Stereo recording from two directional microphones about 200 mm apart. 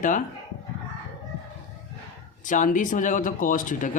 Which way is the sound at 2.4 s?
40° left (ahead or behind).